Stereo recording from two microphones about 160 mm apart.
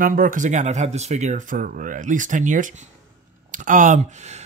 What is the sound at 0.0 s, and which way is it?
Speech, 60° right (ahead or behind).